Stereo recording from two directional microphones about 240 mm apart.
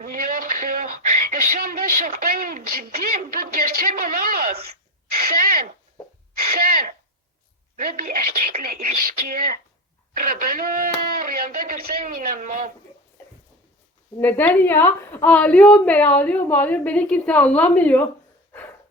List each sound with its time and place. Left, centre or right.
0.0 s speech: right
5.2 s a sound: right
6.6 s throat clearing: right
7.8 s a woman's voice: right
14.2 s a woman's voice: centre